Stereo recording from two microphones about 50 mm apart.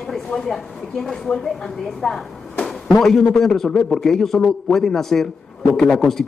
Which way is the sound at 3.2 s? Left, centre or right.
Centre.